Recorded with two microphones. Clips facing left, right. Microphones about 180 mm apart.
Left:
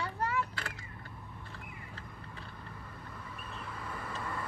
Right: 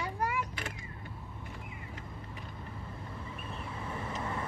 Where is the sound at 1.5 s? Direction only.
15° right (ahead or behind).